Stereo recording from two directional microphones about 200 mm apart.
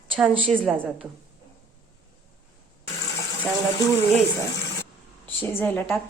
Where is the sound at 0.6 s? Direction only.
Centre (ahead or behind).